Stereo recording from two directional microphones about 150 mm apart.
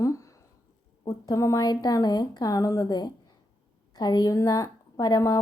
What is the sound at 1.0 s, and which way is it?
A woman's voice, 25° left (ahead or behind).